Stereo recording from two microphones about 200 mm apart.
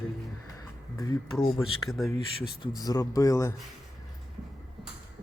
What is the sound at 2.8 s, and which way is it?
Speech, 20° left (ahead or behind).